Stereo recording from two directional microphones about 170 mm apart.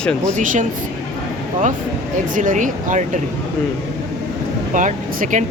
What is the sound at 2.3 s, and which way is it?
Speech, 50° right (ahead or behind).